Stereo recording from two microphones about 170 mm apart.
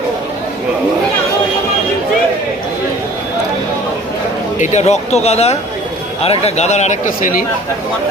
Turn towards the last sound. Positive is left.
turn(degrees=50)  # may be behind; listen again after turning